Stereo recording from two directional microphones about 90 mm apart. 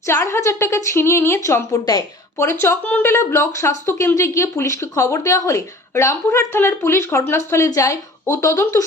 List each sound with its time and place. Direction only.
0.0 s a woman's voice: 30° left (ahead or behind)
2.4 s a woman's voice: 30° left (ahead or behind)